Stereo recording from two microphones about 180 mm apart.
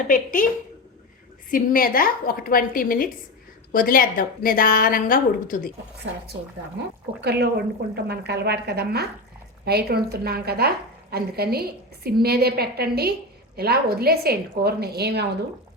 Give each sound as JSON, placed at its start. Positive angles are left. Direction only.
{"t": 0.1, "sound": "a woman's voice", "side_deg": 50}
{"t": 1.5, "sound": "a woman's voice", "side_deg": 50}
{"t": 7.2, "sound": "a woman's voice", "side_deg": -65}